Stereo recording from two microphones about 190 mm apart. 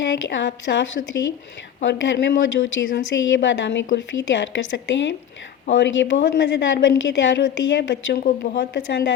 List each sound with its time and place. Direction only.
0.0 s a woman's voice: 70° left (ahead or behind)